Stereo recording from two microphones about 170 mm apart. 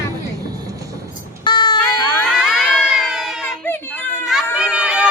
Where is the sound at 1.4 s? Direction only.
25° left (ahead or behind).